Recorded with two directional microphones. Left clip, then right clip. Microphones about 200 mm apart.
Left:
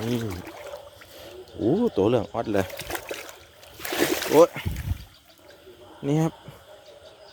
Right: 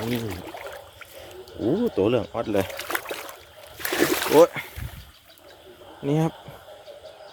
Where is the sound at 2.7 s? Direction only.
5° right (ahead or behind).